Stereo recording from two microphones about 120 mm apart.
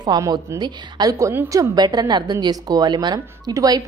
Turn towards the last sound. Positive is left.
turn(degrees=-30)  # may be behind; listen again after turning